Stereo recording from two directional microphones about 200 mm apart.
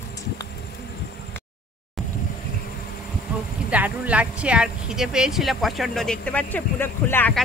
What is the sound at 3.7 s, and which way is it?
Speech, 5° right (ahead or behind).